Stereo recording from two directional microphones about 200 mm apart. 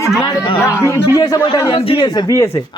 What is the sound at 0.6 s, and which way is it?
A man's voice, 15° left (ahead or behind).